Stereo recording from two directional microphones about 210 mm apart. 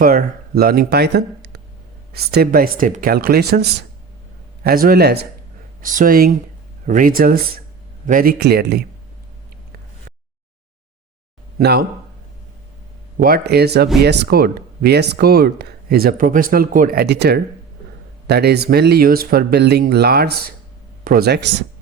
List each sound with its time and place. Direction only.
0.0 s speech: 40° right (ahead or behind)
5.8 s speech: 40° right (ahead or behind)
11.6 s speech: 50° right (ahead or behind)
13.1 s speech: 45° right (ahead or behind)